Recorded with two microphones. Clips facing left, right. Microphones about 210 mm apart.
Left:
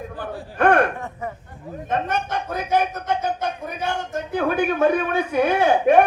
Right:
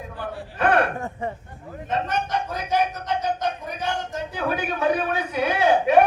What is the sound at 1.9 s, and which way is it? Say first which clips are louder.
Speech: left 1 dB; 50° left (ahead or behind).